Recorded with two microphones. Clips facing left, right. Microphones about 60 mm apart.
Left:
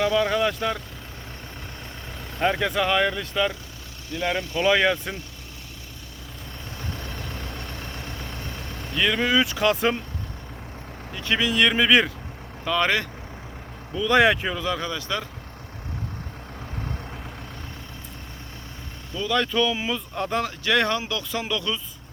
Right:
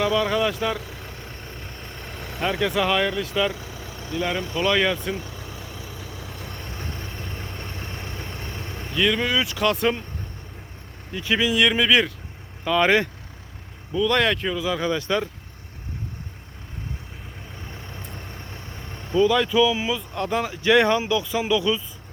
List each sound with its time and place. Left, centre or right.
0.0 s speech: centre
2.1 s speech: centre
4.2 s speech: left
4.5 s speech: centre
6.7 s vehicle: right
8.9 s speech: centre
11.1 s speech: centre
13.9 s speech: centre
14.6 s speech: centre
14.8 s speech: right
19.3 s speech: centre
20.4 s speech: centre